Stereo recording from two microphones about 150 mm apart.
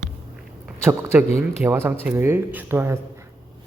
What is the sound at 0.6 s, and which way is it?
A man's voice, 10° right (ahead or behind).